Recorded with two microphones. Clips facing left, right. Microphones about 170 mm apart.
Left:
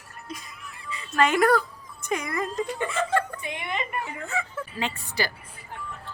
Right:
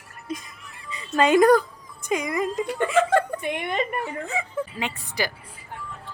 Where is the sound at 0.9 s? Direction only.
20° right (ahead or behind).